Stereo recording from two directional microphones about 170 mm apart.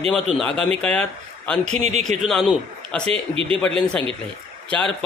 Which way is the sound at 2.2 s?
Centre (ahead or behind).